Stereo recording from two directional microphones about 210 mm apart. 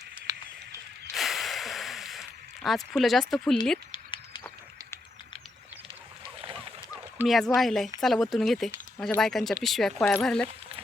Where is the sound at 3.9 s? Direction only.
25° left (ahead or behind).